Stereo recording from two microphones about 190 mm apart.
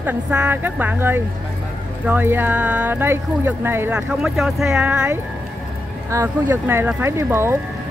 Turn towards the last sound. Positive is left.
turn(degrees=-15)  # may be behind; listen again after turning